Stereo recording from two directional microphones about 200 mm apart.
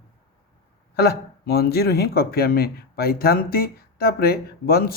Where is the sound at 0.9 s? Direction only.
55° left (ahead or behind).